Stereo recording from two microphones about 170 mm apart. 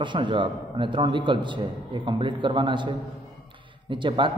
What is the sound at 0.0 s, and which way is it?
A man's voice, 30° right (ahead or behind).